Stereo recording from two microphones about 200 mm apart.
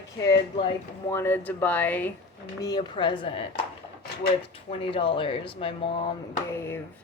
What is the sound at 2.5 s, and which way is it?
Speech, 20° left (ahead or behind).